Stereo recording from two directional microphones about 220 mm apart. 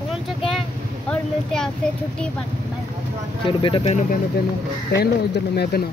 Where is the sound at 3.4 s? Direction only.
25° left (ahead or behind).